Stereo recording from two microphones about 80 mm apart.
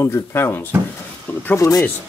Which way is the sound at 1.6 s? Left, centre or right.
Left.